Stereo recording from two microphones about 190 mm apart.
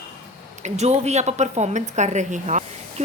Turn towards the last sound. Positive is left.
turn(degrees=-40)  # may be behind; listen again after turning